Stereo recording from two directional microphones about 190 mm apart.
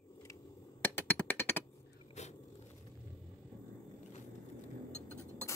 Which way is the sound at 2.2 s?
35° left (ahead or behind).